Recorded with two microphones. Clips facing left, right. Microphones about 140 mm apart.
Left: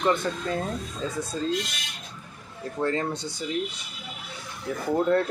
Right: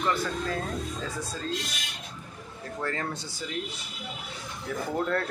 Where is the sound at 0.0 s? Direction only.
20° left (ahead or behind).